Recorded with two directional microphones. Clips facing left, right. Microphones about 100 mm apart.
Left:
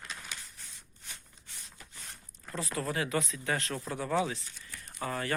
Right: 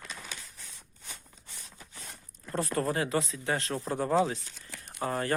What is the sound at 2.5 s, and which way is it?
Speech, 50° right (ahead or behind).